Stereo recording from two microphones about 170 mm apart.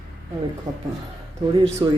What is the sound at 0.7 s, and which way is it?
Speech, 25° right (ahead or behind).